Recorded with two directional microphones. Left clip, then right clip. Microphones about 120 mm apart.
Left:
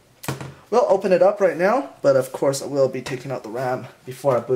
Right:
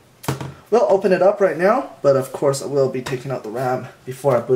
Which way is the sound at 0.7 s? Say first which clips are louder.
Right 2 dB; 25° left (ahead or behind).